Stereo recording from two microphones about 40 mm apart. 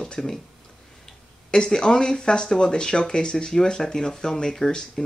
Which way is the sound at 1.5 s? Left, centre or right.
Left.